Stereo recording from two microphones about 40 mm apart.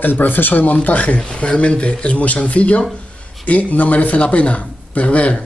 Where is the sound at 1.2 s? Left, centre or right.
Left.